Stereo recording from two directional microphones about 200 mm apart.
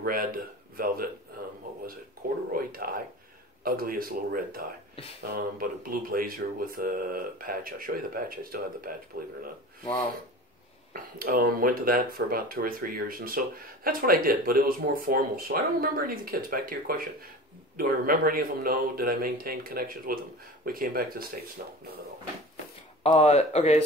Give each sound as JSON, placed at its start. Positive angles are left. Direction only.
{"t": 0.0, "sound": "speech", "side_deg": -45}
{"t": 2.5, "sound": "a sound", "side_deg": -45}
{"t": 3.6, "sound": "speech", "side_deg": -45}
{"t": 10.9, "sound": "speech", "side_deg": -45}
{"t": 23.1, "sound": "speech", "side_deg": 30}